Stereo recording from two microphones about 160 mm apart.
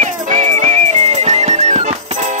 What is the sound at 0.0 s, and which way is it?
Music, 50° right (ahead or behind).